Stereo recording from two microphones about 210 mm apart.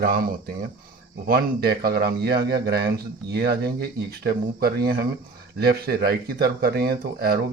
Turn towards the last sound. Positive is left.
turn(degrees=-45)  # may be behind; listen again after turning